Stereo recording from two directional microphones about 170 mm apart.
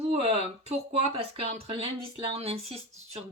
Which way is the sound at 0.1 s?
35° right (ahead or behind).